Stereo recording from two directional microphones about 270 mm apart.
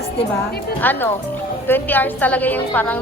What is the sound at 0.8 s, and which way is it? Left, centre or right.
A woman's voice, centre.